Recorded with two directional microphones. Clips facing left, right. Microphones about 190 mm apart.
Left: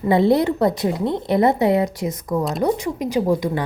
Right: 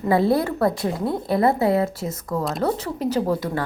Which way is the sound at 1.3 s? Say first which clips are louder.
Left 2 dB; 20° left (ahead or behind).